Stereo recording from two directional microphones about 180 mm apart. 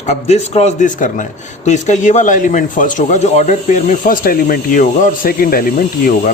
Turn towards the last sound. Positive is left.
turn(degrees=50)  # may be behind; listen again after turning